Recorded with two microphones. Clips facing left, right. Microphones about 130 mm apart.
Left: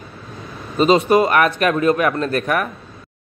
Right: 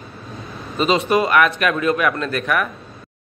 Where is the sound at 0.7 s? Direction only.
35° left (ahead or behind).